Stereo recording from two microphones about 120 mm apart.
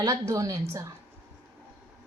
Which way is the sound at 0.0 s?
25° right (ahead or behind).